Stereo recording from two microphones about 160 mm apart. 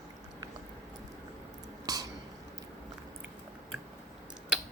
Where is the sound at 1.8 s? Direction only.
25° right (ahead or behind).